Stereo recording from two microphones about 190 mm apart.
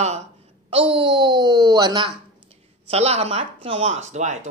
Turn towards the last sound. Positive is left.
turn(degrees=-35)  # may be behind; listen again after turning